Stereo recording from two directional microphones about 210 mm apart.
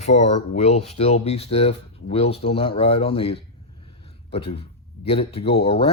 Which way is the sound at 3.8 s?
25° left (ahead or behind).